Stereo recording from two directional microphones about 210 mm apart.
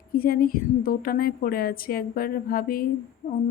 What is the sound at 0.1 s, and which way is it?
Speech, 45° left (ahead or behind).